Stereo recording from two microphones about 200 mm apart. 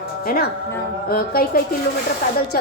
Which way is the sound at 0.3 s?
50° left (ahead or behind).